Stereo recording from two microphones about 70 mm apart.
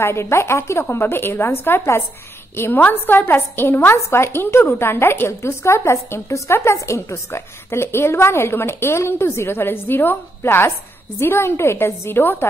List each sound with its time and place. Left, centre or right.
0.0 s a woman's voice: left